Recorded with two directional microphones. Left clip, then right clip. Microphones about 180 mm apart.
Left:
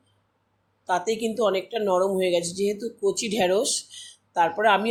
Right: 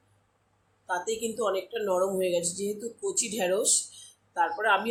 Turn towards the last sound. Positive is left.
turn(degrees=35)  # may be behind; listen again after turning